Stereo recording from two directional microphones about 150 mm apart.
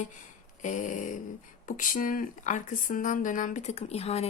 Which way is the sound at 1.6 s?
65° left (ahead or behind).